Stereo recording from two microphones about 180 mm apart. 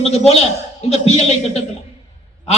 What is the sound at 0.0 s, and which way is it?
A man's voice, 35° left (ahead or behind).